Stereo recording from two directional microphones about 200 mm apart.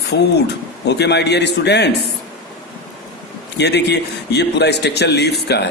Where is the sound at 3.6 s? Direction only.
55° left (ahead or behind).